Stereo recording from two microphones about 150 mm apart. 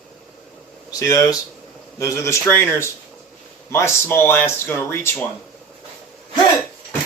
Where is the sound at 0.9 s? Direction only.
20° left (ahead or behind).